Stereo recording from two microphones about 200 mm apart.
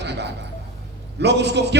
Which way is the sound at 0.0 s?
60° right (ahead or behind).